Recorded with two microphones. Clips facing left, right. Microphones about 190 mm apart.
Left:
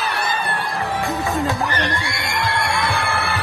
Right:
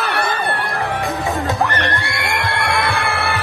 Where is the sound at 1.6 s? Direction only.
60° right (ahead or behind).